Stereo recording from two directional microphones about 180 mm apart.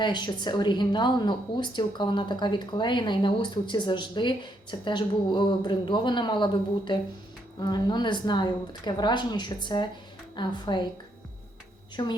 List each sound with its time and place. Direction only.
0.0 s speech: 25° left (ahead or behind)
12.0 s speech: 20° left (ahead or behind)